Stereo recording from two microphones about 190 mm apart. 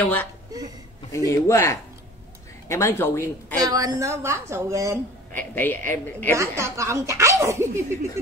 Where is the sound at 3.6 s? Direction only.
20° right (ahead or behind).